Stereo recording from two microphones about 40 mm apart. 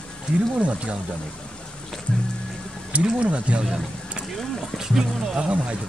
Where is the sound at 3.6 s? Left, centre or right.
Centre.